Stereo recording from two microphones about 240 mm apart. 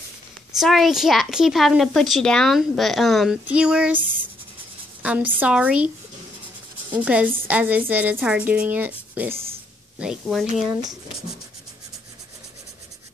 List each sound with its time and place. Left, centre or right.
0.6 s a child's voice: centre
7.1 s a woman's voice: centre
10.7 s a woman's voice: centre